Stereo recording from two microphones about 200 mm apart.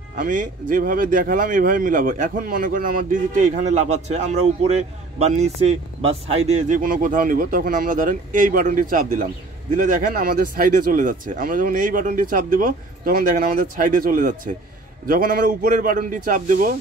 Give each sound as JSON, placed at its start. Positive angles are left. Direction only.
{"t": 0.1, "sound": "a man's voice", "side_deg": -40}